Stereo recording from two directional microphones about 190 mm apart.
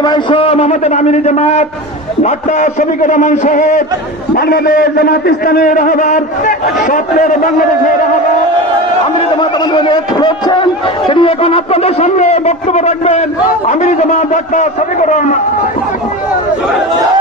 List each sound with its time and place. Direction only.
0.0 s a man's voice: 25° left (ahead or behind); by 3.8 s 40° left (ahead or behind)
4.4 s a man's voice: 55° left (ahead or behind)
9.4 s a man's voice: 25° left (ahead or behind); by 15.2 s 40° left (ahead or behind)